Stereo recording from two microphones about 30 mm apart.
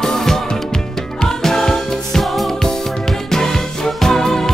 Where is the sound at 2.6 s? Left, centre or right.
Centre.